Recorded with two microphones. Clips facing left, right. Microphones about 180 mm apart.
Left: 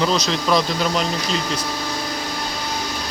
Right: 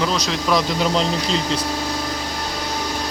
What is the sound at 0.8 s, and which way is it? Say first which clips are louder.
Speech: right 2 dB; 20° right (ahead or behind).